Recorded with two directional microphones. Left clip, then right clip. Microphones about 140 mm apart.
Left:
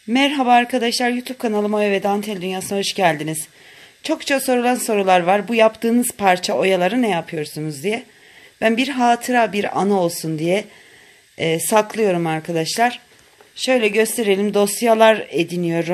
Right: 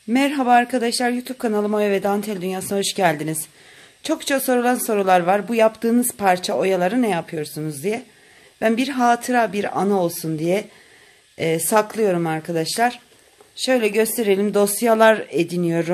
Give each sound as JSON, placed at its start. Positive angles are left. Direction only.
{"t": 0.1, "sound": "speech", "side_deg": 15}